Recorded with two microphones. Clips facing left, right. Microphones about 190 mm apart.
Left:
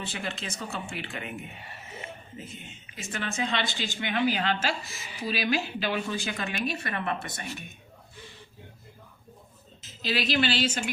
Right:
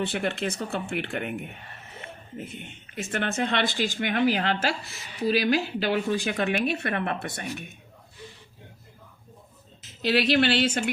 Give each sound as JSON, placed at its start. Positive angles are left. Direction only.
{"t": 0.0, "sound": "speech", "side_deg": -60}
{"t": 1.5, "sound": "gasp", "side_deg": 5}
{"t": 2.4, "sound": "speech", "side_deg": -60}
{"t": 5.8, "sound": "speech", "side_deg": -60}
{"t": 9.8, "sound": "speech", "side_deg": -60}